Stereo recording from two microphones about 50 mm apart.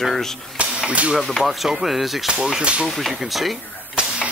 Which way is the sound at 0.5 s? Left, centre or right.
Right.